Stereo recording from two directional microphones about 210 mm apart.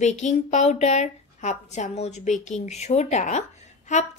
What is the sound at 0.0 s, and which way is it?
A woman's voice, 35° left (ahead or behind).